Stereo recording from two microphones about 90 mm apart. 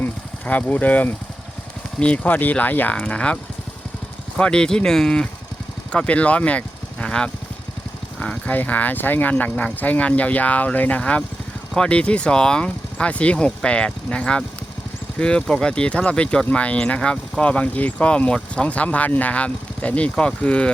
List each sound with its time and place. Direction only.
0.0 s speech: 15° left (ahead or behind)
4.4 s speech: 10° left (ahead or behind)